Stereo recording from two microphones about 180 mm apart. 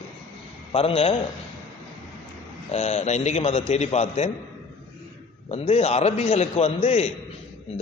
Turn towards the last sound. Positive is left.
turn(degrees=35)  # may be behind; listen again after turning